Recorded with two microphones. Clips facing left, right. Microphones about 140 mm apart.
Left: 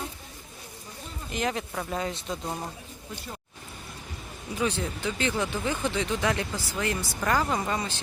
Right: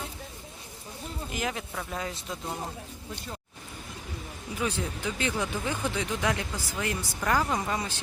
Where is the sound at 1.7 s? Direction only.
15° left (ahead or behind).